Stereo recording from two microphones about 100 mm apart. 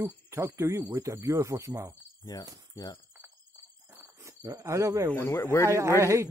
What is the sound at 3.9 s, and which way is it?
Cricket, 20° right (ahead or behind).